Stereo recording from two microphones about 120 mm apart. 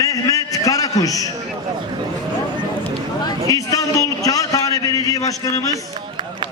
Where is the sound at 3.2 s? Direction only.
30° left (ahead or behind).